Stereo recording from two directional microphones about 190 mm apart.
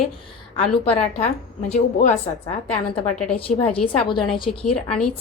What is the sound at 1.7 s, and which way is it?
Speech, 40° left (ahead or behind).